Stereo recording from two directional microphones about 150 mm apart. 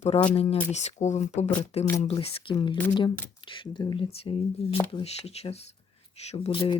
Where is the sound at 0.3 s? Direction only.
40° left (ahead or behind).